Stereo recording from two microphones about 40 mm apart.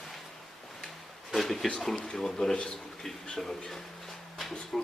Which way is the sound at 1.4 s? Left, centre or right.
Centre.